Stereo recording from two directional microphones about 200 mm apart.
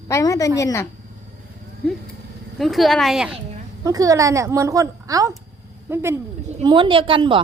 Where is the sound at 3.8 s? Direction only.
15° right (ahead or behind).